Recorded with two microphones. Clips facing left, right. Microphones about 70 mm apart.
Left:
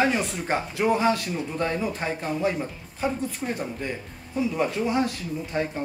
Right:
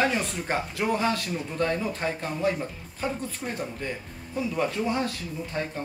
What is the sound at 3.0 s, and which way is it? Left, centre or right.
Speech, centre.